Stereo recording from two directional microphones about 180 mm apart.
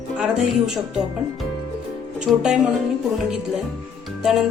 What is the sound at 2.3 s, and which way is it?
Speech, 5° right (ahead or behind).